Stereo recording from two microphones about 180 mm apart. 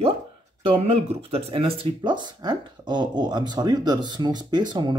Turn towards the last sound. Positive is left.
turn(degrees=-25)  # may be behind; listen again after turning